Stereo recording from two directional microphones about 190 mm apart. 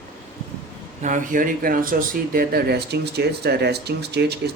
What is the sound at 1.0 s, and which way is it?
Speech, 45° right (ahead or behind).